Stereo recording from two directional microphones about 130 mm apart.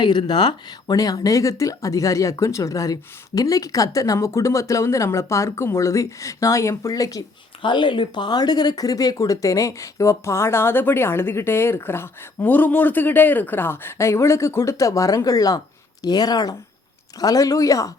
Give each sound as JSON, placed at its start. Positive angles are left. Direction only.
{"t": 0.0, "sound": "speech", "side_deg": 35}